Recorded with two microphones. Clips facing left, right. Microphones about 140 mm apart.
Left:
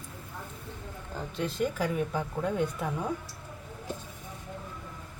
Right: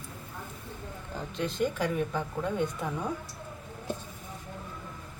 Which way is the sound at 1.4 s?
5° left (ahead or behind).